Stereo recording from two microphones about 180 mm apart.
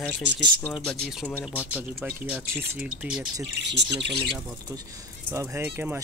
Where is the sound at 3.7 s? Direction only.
75° right (ahead or behind).